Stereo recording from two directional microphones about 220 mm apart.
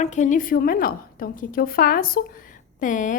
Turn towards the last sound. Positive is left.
turn(degrees=35)  # may be behind; listen again after turning